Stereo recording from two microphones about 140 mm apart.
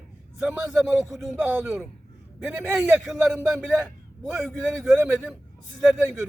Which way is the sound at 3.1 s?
Centre (ahead or behind).